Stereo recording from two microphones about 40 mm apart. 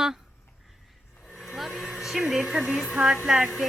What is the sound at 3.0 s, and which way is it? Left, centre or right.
Hair dryer, right.